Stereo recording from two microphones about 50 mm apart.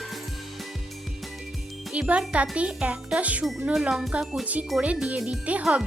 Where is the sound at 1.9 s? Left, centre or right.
Right.